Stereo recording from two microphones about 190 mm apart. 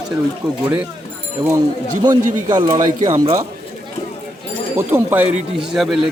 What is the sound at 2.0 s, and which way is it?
A man's voice, 20° right (ahead or behind).